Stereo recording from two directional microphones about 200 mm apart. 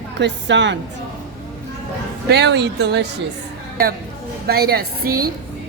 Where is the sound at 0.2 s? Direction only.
60° right (ahead or behind).